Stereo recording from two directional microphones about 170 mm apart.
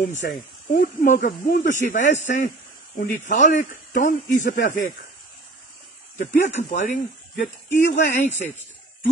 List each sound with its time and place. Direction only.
0.2 s speech: 55° left (ahead or behind)
1.2 s speech: 65° left (ahead or behind)
1.7 s speech: 45° left (ahead or behind)
6.1 s speech: 45° left (ahead or behind)